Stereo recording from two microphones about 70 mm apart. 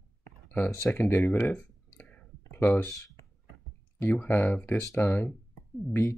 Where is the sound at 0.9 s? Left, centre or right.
Left.